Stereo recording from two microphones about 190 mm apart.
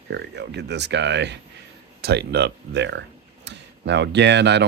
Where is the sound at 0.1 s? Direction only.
65° right (ahead or behind).